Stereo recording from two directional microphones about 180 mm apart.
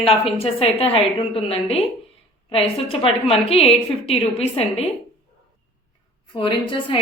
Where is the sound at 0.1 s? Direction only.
30° left (ahead or behind).